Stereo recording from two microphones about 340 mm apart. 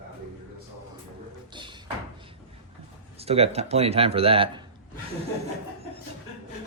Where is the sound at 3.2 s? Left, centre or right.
Centre.